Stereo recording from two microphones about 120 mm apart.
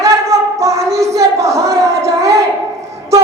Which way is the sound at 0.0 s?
25° right (ahead or behind).